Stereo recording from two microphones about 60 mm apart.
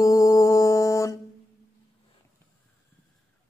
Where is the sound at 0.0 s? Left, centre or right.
Left.